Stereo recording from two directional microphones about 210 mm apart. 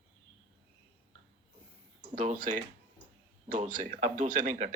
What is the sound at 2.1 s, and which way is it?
A man's voice, 40° right (ahead or behind).